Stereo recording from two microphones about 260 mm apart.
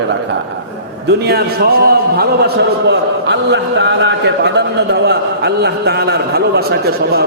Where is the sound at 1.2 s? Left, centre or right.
Right.